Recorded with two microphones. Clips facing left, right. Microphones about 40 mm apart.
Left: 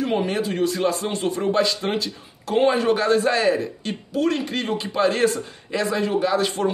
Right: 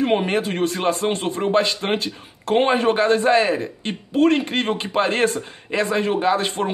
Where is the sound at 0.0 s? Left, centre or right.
Right.